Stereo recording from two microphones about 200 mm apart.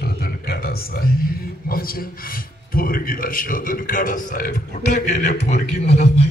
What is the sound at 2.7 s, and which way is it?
A man's voice, 45° left (ahead or behind).